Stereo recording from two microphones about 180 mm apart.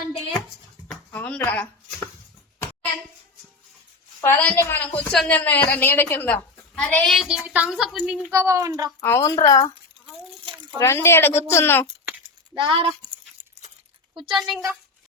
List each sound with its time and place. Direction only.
0.9 s a sound: 5° left (ahead or behind)
1.4 s speech: 15° left (ahead or behind)
4.2 s a woman's voice: 10° left (ahead or behind); by 8.9 s 20° right (ahead or behind)
9.0 s speech: 15° left (ahead or behind)
10.8 s speech: 15° left (ahead or behind)
12.5 s speech: 30° right (ahead or behind)
14.1 s a child's voice: 25° right (ahead or behind)
14.3 s a woman's voice: centre (ahead or behind)